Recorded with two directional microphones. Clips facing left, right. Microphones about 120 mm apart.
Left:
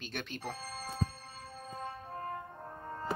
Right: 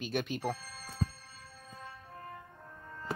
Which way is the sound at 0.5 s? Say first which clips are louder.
Left 1 dB; 55° left (ahead or behind).